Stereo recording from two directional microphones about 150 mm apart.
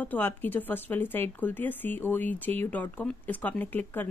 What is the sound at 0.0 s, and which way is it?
Speech, 10° left (ahead or behind).